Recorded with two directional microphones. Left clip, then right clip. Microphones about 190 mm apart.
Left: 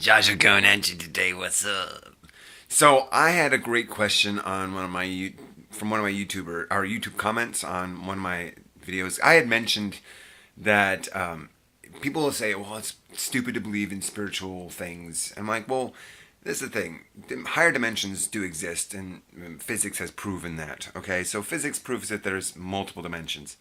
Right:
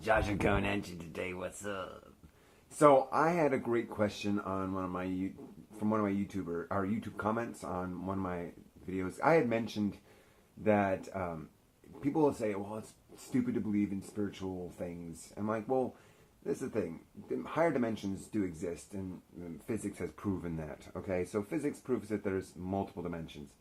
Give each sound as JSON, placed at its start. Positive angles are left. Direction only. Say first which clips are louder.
{"t": 0.0, "sound": "speech", "louder": "left 13 dB", "side_deg": 15}
{"t": 3.1, "sound": "speech", "louder": "left 10 dB", "side_deg": 30}
{"t": 6.5, "sound": "speech", "louder": "left 9 dB", "side_deg": 35}
{"t": 12.4, "sound": "speech", "louder": "left 8 dB", "side_deg": 20}